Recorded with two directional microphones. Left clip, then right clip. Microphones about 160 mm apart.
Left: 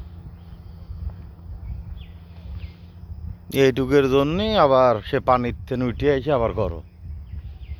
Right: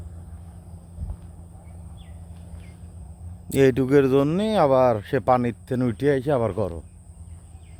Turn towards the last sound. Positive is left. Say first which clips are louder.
# left 2 dB
turn(degrees=0)  # may be behind; listen again after turning